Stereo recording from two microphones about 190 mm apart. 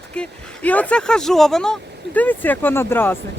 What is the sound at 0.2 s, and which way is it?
Speech, 5° left (ahead or behind).